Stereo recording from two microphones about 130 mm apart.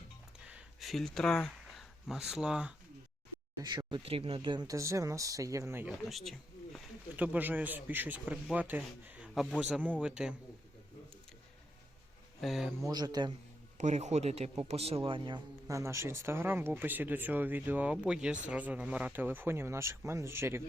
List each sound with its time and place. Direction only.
0.4 s a sound: 5° right (ahead or behind)
3.6 s speech: 30° right (ahead or behind)
5.9 s speech: centre (ahead or behind)
7.2 s speech: 15° right (ahead or behind)
12.4 s speech: centre (ahead or behind)
12.8 s speech: 30° right (ahead or behind)
13.7 s a man's voice: 65° right (ahead or behind); by 15.4 s 40° right (ahead or behind)
15.6 s speech: 25° right (ahead or behind)